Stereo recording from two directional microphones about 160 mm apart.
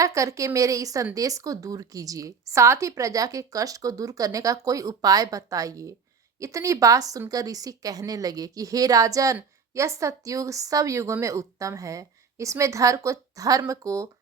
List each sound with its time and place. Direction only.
0.0 s speech: 20° right (ahead or behind)